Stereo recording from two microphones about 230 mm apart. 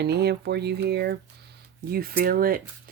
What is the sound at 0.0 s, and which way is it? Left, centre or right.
Speech, right.